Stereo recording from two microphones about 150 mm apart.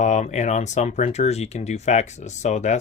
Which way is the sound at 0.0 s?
50° left (ahead or behind).